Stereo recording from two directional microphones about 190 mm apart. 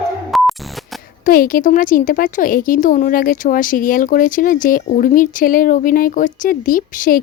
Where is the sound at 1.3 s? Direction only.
50° left (ahead or behind).